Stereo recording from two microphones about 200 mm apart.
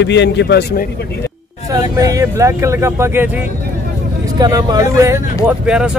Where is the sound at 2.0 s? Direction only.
15° right (ahead or behind).